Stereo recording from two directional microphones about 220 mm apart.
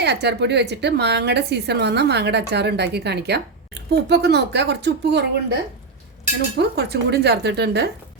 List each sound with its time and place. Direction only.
0.0 s a woman's voice: 50° right (ahead or behind)
6.6 s a woman's voice: 45° right (ahead or behind)